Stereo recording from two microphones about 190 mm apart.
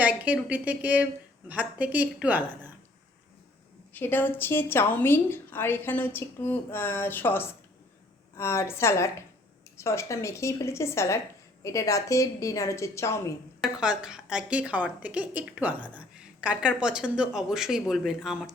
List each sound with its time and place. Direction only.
0.0 s a woman's voice: 10° right (ahead or behind)
3.9 s a woman's voice: 10° left (ahead or behind)
13.6 s a woman's voice: 5° right (ahead or behind)